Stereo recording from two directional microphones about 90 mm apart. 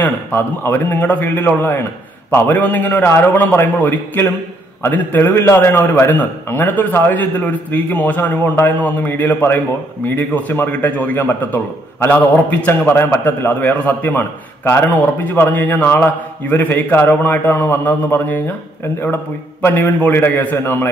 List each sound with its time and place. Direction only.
0.0 s a man's voice: 20° left (ahead or behind)
19.6 s a man's voice: 20° left (ahead or behind)